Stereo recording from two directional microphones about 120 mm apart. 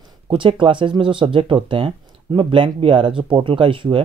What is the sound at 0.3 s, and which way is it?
Speech, 45° right (ahead or behind).